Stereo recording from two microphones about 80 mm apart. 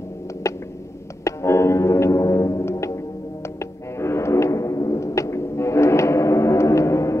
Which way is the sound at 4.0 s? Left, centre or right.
Left.